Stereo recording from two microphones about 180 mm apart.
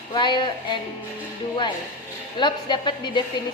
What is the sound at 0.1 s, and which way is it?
Speech, 25° left (ahead or behind).